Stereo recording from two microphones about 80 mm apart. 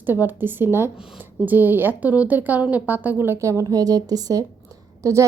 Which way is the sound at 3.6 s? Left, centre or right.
Right.